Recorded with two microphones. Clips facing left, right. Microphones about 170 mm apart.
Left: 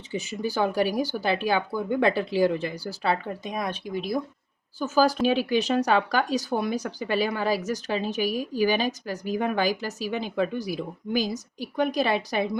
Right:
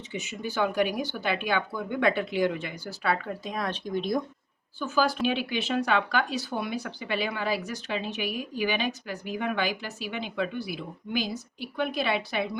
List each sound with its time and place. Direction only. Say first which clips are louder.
0.1 s speech: left 6 dB; 35° left (ahead or behind); by 4.2 s 5° left (ahead or behind)
4.8 s speech: left 4 dB; 40° left (ahead or behind)